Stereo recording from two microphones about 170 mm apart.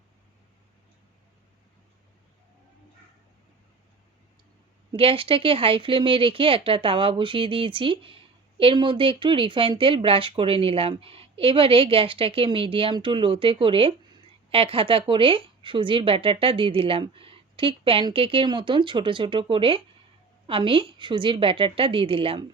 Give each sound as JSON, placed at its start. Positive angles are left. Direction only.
{"t": 4.9, "sound": "speech", "side_deg": -30}